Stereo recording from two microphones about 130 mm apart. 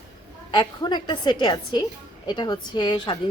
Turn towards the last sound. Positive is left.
turn(degrees=35)  # may be behind; listen again after turning